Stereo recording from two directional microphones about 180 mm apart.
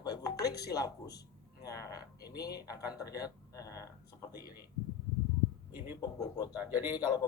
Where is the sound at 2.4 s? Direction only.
20° left (ahead or behind).